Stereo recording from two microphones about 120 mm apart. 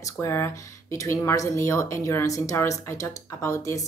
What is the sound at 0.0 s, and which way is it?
A woman's voice, 25° left (ahead or behind).